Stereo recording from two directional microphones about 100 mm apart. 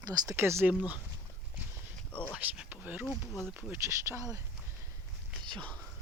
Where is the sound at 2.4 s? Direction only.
15° right (ahead or behind).